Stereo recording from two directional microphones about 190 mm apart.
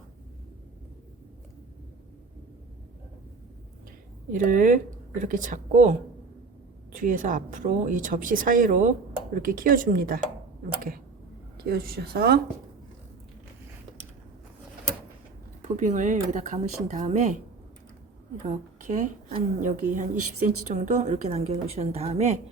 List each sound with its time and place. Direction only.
4.3 s speech: 45° right (ahead or behind)
11.6 s speech: 55° right (ahead or behind)
15.6 s a woman's voice: 40° right (ahead or behind)
18.4 s a woman's voice: 40° right (ahead or behind)